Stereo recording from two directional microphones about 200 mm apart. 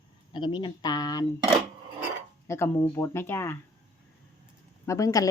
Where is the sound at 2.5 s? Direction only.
10° left (ahead or behind).